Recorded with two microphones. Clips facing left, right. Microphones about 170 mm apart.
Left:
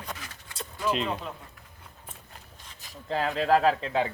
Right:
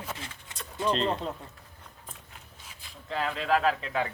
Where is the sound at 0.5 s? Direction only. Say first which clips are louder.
Left 8 dB; 20° right (ahead or behind).